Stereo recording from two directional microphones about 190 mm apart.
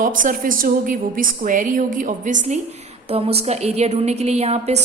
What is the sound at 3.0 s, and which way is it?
A woman's voice, 30° right (ahead or behind).